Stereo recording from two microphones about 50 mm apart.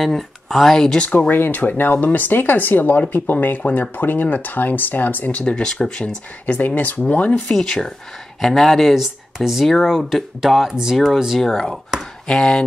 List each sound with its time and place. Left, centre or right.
0.0 s speech: centre
1.1 s speech: left
5.4 s speech: centre
6.4 s speech: left
7.5 s speech: centre
8.9 s speech: centre
11.3 s speech: centre